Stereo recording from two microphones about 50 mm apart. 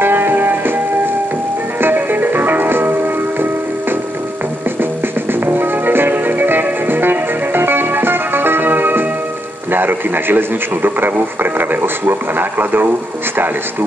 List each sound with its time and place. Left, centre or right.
0.0 s music: right
1.8 s music: right
5.4 s music: right
9.7 s radio: right
11.7 s speech: right